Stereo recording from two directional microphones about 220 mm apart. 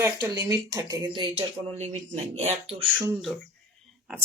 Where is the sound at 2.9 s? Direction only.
5° right (ahead or behind).